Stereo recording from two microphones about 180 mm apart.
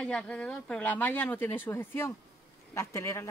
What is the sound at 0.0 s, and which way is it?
Speech, 5° left (ahead or behind).